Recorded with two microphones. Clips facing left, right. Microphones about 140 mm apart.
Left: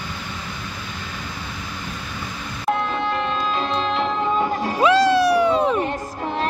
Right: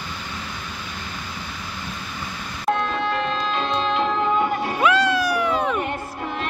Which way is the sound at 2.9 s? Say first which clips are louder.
Left 1 dB; 25° left (ahead or behind).